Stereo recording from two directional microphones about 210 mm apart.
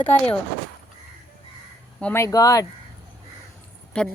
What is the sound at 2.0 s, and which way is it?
Speech, 10° left (ahead or behind).